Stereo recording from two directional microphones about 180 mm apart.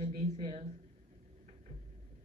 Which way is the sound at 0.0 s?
40° right (ahead or behind).